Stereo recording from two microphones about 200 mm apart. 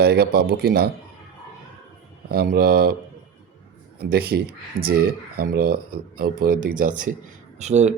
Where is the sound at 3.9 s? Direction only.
50° right (ahead or behind); by 8.0 s 35° right (ahead or behind).